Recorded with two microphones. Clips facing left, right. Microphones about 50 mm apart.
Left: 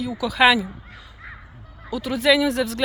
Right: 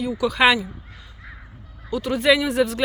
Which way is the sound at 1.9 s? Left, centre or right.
Centre.